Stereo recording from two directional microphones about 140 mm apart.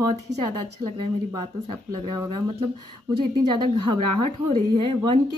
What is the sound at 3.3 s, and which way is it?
A woman's voice, 35° right (ahead or behind).